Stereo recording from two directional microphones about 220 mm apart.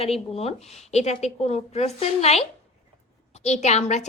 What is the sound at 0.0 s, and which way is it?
A woman's voice, 25° left (ahead or behind).